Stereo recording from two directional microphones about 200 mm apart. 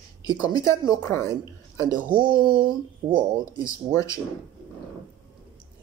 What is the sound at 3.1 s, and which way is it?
Speech, 25° right (ahead or behind).